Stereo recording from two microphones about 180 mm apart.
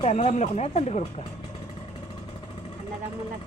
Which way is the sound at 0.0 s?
35° left (ahead or behind).